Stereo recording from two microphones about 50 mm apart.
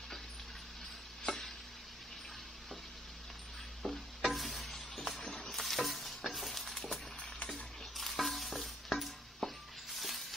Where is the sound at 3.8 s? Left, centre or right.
Centre.